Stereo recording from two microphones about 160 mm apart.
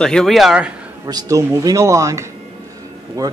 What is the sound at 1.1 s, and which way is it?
Speech, 20° right (ahead or behind).